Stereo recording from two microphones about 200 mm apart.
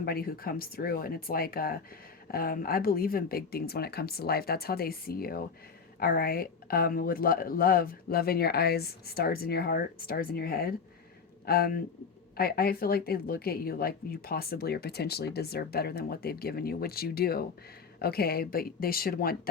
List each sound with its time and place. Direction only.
0.0 s speech: 50° left (ahead or behind)